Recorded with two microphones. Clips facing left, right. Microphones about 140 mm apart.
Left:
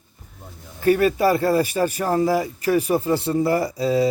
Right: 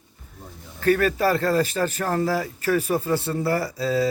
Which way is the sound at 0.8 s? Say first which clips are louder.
Left 3 dB; 15° left (ahead or behind).